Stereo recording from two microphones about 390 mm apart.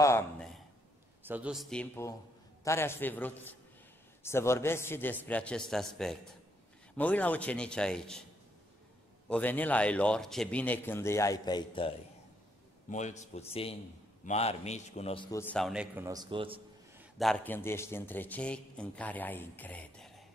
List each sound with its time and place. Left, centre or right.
0.0 s a sound: centre
1.2 s a man's voice: centre
9.3 s a man's voice: centre
12.9 s a man's voice: centre
17.2 s a man's voice: centre